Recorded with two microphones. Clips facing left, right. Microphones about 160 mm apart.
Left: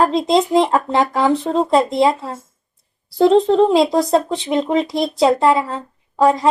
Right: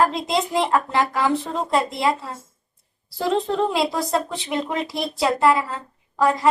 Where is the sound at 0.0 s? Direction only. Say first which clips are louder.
Left 6 dB; 25° left (ahead or behind).